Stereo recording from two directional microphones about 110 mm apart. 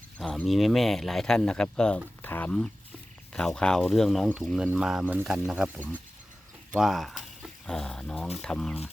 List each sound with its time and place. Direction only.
0.2 s speech: 5° left (ahead or behind)